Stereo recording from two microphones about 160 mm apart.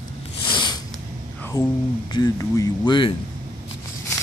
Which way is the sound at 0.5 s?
30° left (ahead or behind).